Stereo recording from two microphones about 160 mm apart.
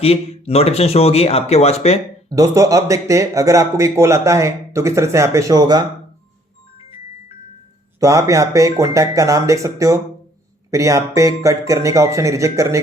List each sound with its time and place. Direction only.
0.0 s speech: 40° left (ahead or behind)
2.3 s speech: 20° right (ahead or behind)
7.9 s speech: 20° right (ahead or behind)